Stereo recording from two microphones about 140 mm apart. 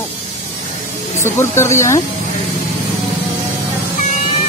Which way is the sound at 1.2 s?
20° left (ahead or behind).